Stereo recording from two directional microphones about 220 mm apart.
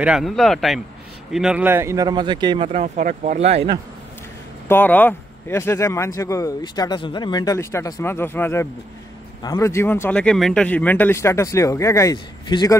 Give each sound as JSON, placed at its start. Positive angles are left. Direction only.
{"t": 0.0, "sound": "a man's voice", "side_deg": 0}
{"t": 4.6, "sound": "speech", "side_deg": 10}